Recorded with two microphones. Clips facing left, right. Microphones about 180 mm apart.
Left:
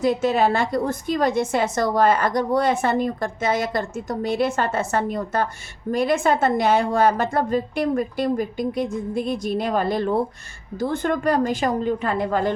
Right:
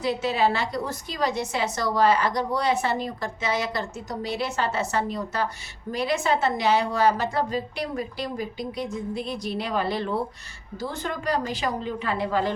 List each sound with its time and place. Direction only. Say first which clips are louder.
0.0 s a woman's voice: left 5 dB; 50° left (ahead or behind)